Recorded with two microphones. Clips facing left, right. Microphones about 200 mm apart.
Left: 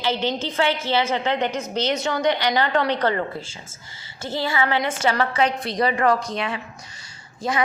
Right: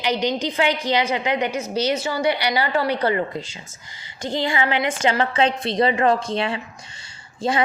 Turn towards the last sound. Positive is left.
turn(degrees=-30)  # may be behind; listen again after turning